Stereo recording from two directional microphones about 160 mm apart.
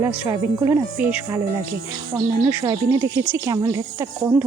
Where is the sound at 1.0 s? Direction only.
10° right (ahead or behind).